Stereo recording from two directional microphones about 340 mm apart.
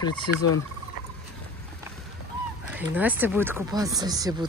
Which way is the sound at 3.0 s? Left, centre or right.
Centre.